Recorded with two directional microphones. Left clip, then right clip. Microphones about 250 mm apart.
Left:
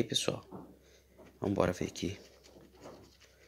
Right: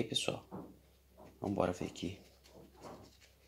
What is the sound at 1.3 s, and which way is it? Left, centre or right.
Speech, left.